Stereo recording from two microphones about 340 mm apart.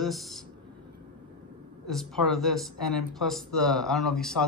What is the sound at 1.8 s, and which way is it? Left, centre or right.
A woman's voice, centre.